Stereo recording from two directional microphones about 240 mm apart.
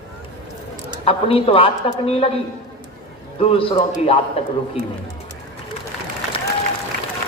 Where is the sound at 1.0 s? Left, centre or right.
Left.